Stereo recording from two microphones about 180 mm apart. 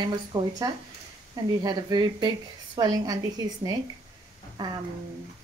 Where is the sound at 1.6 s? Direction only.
20° right (ahead or behind).